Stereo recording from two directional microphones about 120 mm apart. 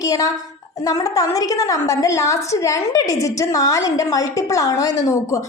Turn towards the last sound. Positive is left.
turn(degrees=30)  # may be behind; listen again after turning